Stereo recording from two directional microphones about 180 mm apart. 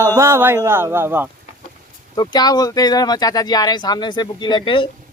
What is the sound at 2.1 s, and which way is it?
Speech, 20° left (ahead or behind).